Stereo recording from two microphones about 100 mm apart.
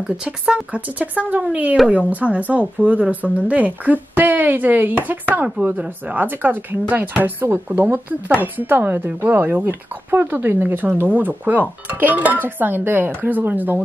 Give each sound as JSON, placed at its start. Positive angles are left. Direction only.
{"t": 0.2, "sound": "speech", "side_deg": -10}